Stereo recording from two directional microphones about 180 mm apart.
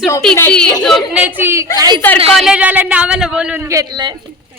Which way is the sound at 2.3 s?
Centre (ahead or behind).